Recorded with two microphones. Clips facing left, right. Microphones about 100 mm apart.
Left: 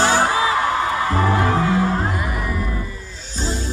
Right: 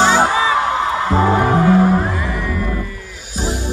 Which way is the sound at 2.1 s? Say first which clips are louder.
Right 3 dB; 10° left (ahead or behind).